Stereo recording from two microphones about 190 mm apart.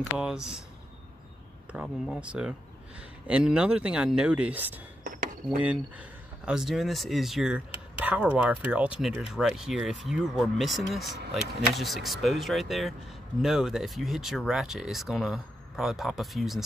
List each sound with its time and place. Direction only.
0.2 s speech: 5° right (ahead or behind)
1.7 s speech: 5° right (ahead or behind)
5.0 s dishes: 45° right (ahead or behind)
5.6 s speech: 5° right (ahead or behind)